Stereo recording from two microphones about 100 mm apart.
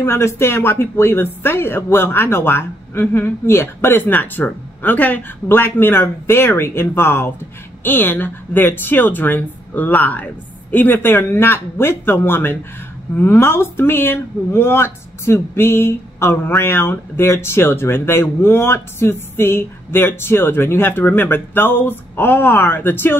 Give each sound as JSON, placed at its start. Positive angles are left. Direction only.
{"t": 0.0, "sound": "speech", "side_deg": 25}